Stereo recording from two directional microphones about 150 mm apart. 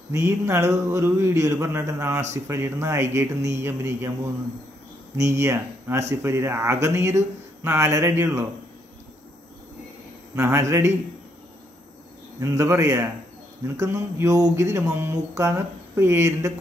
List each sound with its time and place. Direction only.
0.1 s mantra: 20° right (ahead or behind)
2.3 s speech: 20° right (ahead or behind)
5.1 s speech: 20° right (ahead or behind)
10.3 s mantra: 20° right (ahead or behind)
12.4 s mantra: 15° right (ahead or behind)